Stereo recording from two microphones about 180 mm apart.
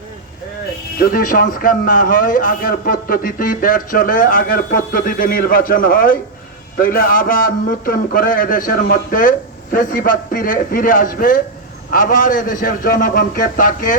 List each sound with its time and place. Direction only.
0.9 s speech: 55° left (ahead or behind)